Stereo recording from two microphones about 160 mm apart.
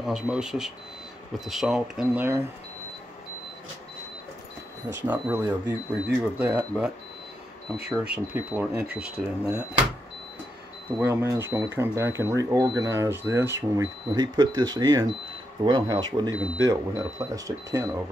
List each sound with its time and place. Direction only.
0.0 s speech: 5° right (ahead or behind)
5.0 s speech: 15° right (ahead or behind)
7.9 s speech: 5° right (ahead or behind)
11.0 s speech: 15° right (ahead or behind)